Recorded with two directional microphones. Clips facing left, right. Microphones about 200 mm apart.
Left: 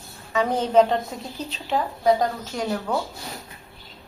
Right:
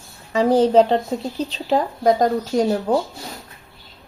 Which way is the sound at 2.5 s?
30° right (ahead or behind).